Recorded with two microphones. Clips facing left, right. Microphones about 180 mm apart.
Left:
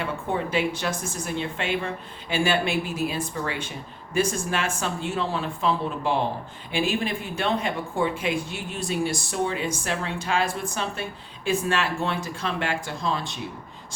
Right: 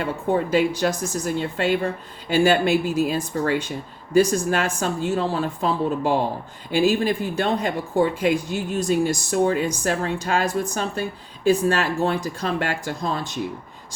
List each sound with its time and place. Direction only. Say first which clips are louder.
0.0 s speech: right 5 dB; 40° right (ahead or behind)